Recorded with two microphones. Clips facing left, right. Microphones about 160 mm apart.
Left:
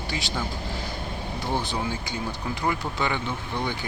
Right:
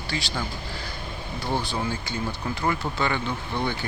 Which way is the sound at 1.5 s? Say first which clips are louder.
Right 1 dB; 15° left (ahead or behind).